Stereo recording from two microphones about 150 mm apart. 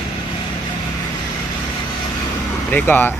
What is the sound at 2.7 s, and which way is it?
Speech, 15° left (ahead or behind).